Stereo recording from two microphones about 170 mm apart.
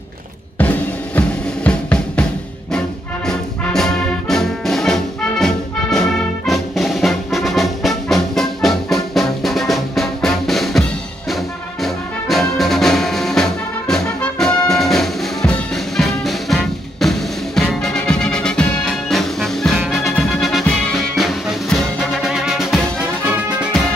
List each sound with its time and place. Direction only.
0.6 s music: 10° left (ahead or behind)
3.3 s brass instrument: 5° left (ahead or behind)
11.8 s music: centre (ahead or behind)